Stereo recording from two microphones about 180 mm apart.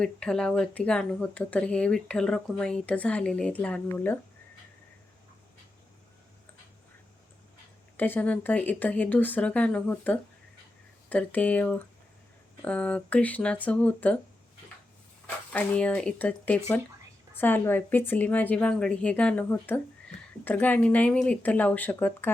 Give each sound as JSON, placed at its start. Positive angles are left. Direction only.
{"t": 0.0, "sound": "speech", "side_deg": 5}
{"t": 7.9, "sound": "speech", "side_deg": 10}
{"t": 15.5, "sound": "speech", "side_deg": 10}